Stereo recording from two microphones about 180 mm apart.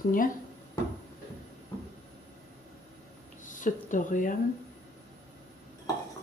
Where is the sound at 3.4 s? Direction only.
45° left (ahead or behind).